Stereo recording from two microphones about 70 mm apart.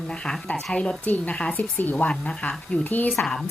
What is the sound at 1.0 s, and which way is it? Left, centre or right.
Speech, left.